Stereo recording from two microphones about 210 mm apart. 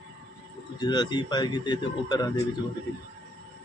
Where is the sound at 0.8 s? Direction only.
20° left (ahead or behind).